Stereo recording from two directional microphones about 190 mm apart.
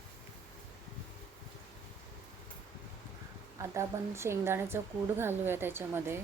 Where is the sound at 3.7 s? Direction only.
15° right (ahead or behind).